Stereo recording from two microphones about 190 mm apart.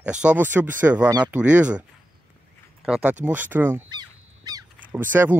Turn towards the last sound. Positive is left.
turn(degrees=-10)  # may be behind; listen again after turning